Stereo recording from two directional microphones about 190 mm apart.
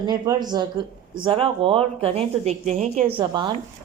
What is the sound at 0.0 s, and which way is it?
A woman's voice, 20° right (ahead or behind).